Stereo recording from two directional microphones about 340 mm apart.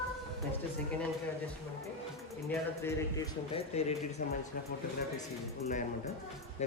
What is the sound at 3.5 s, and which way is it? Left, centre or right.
Speech, centre.